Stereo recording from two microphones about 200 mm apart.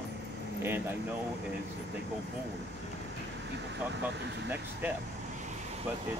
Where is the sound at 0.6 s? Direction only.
10° right (ahead or behind).